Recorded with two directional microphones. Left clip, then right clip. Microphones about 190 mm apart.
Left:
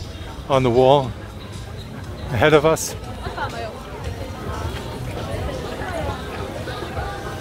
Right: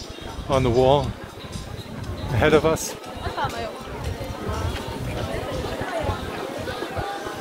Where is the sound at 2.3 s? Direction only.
25° left (ahead or behind).